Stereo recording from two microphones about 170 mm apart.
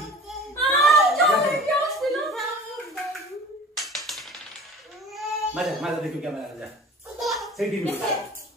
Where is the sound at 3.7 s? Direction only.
Centre (ahead or behind).